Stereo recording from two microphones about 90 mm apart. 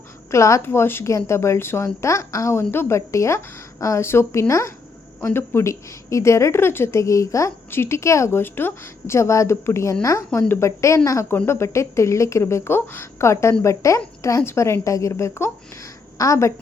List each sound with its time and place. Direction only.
0.3 s a woman's voice: 35° left (ahead or behind)